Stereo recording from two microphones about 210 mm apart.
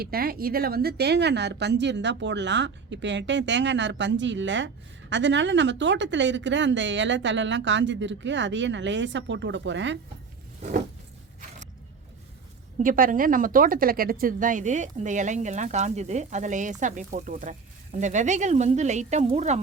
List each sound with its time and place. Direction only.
0.0 s speech: 45° right (ahead or behind)
10.6 s a sound: 40° right (ahead or behind)
12.8 s speech: 40° right (ahead or behind)